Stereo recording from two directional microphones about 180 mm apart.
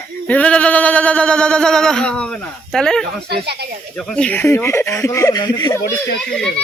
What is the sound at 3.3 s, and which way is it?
Speech, 65° right (ahead or behind).